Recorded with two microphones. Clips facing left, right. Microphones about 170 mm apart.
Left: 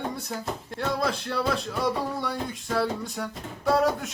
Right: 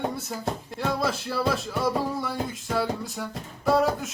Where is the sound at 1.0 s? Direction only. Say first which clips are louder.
Right 1 dB; 5° right (ahead or behind).